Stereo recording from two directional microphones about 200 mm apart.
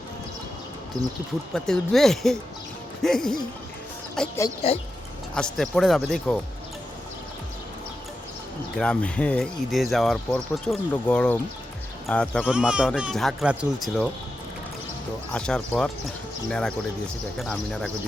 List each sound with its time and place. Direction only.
1.5 s speech: centre (ahead or behind)
4.6 s speech: 30° left (ahead or behind)
5.3 s speech: 5° left (ahead or behind)
8.8 s speech: 5° left (ahead or behind)
15.3 s speech: 5° left (ahead or behind)